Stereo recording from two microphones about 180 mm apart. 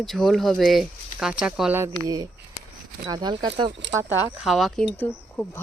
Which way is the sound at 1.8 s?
20° right (ahead or behind).